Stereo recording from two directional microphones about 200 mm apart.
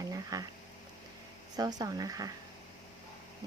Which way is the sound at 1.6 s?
20° right (ahead or behind).